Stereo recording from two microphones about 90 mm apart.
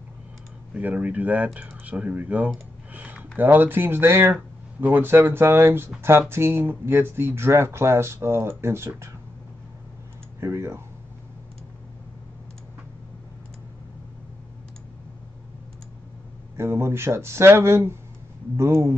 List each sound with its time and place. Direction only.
0.7 s speech: 15° right (ahead or behind)
10.4 s speech: 30° right (ahead or behind)
16.5 s speech: 30° right (ahead or behind)